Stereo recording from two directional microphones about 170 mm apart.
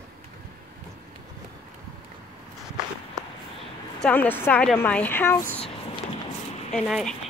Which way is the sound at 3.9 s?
10° left (ahead or behind).